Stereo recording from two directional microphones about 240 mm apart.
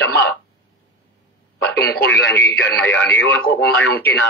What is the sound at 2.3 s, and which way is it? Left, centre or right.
Speech, centre.